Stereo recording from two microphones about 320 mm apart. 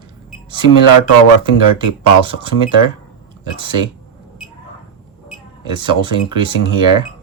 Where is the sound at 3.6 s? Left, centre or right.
Centre.